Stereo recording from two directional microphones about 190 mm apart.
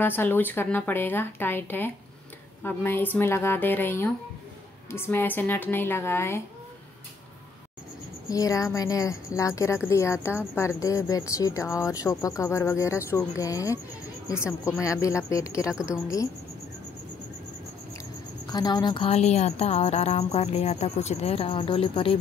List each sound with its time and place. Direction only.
0.0 s speech: 10° left (ahead or behind)
8.3 s speech: 20° left (ahead or behind)
18.5 s speech: 20° left (ahead or behind)